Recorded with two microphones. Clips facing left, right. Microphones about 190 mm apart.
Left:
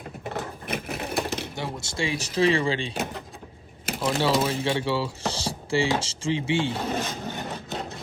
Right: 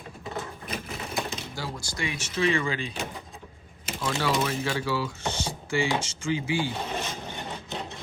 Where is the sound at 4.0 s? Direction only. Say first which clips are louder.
Left 4 dB; 25° left (ahead or behind).